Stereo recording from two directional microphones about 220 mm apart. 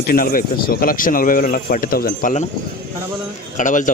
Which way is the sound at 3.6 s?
35° left (ahead or behind).